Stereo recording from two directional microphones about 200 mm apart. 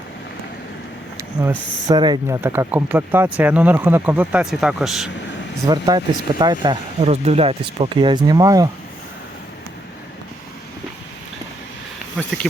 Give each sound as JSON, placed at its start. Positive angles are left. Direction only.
{"t": 1.1, "sound": "speech", "side_deg": -10}
{"t": 5.6, "sound": "speech", "side_deg": -20}